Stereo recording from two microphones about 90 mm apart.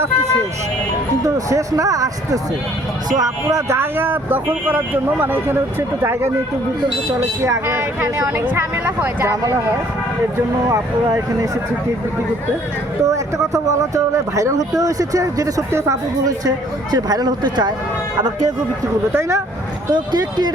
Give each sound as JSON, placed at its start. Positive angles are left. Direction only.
{"t": 1.5, "sound": "speech", "side_deg": -35}
{"t": 3.8, "sound": "speech", "side_deg": -25}
{"t": 7.4, "sound": "speech", "side_deg": -35}
{"t": 9.2, "sound": "speech", "side_deg": -35}
{"t": 13.1, "sound": "speech", "side_deg": -35}
{"t": 19.9, "sound": "speech", "side_deg": -50}